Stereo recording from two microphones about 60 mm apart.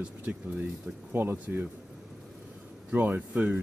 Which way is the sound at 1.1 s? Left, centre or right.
Right.